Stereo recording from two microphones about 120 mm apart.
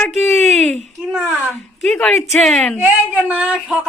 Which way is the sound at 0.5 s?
5° left (ahead or behind).